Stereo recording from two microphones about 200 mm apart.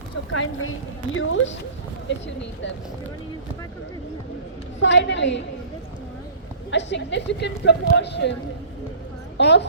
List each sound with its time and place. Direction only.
0.3 s speech: 90° left
1.1 s speech: 75° left (ahead or behind)
2.0 s a woman's voice: 65° left (ahead or behind)
4.8 s a woman's voice: 65° left (ahead or behind)
6.7 s a woman's voice: 60° left (ahead or behind)
9.4 s a woman's voice: 60° left (ahead or behind)